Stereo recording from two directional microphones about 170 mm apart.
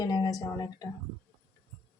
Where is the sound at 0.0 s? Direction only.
20° left (ahead or behind).